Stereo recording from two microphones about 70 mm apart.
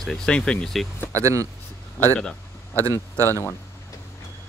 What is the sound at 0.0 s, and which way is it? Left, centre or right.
Speech, centre.